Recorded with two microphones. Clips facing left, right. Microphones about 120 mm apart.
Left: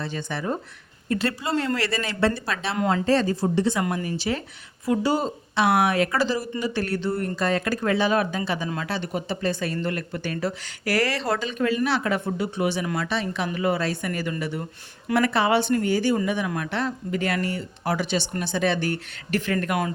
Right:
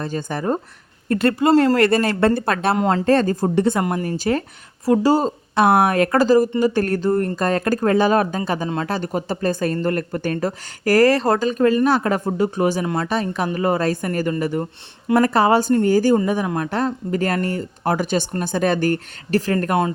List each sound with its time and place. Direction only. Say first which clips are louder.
0.0 s speech: right 5 dB; 45° right (ahead or behind)
2.7 s speech: right 4 dB; 35° right (ahead or behind)
3.0 s speech: right 5 dB; 50° right (ahead or behind); by 19.9 s 35° right (ahead or behind)